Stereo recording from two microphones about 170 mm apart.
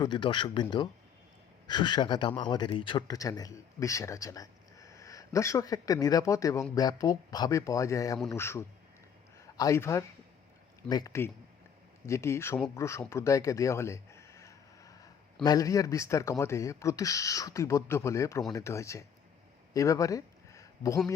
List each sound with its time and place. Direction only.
0.0 s speech: 30° left (ahead or behind)